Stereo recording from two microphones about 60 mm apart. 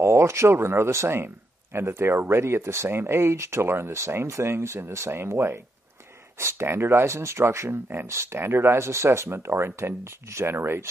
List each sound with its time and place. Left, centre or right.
0.0 s speech: right